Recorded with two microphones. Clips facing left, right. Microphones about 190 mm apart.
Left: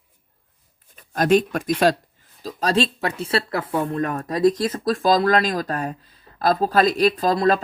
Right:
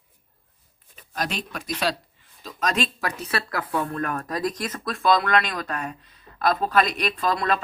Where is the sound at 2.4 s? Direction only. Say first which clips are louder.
Left 5 dB; 35° left (ahead or behind).